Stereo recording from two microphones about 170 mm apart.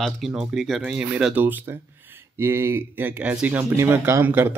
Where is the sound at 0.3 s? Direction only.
5° right (ahead or behind).